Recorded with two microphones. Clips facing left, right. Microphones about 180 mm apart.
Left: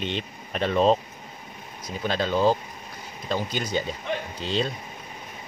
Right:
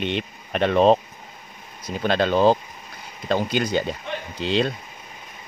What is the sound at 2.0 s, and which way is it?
Speech, 70° right (ahead or behind).